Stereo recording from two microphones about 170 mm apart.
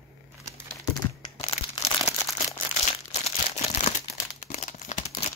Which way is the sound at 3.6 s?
40° left (ahead or behind).